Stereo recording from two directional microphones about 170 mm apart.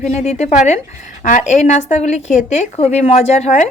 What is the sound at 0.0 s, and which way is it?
A woman's voice, 45° left (ahead or behind).